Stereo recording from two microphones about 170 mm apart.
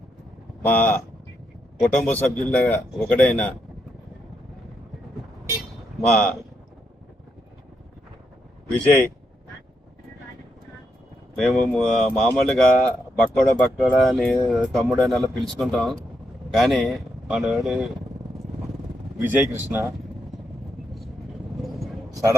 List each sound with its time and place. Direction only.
0.6 s a man's voice: 10° left (ahead or behind)
6.0 s a man's voice: 5° left (ahead or behind)
11.3 s speech: 5° left (ahead or behind)
19.2 s speech: 10° right (ahead or behind)
22.1 s a sound: 20° right (ahead or behind)